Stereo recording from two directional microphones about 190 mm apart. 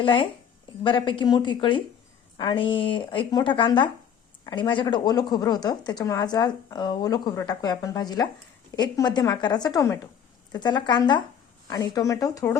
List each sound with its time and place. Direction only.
0.0 s a woman's voice: 25° left (ahead or behind)